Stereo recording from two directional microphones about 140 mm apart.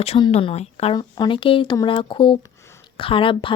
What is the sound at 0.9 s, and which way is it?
A woman's voice, 30° left (ahead or behind).